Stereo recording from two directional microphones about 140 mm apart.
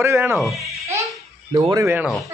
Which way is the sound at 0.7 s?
20° right (ahead or behind).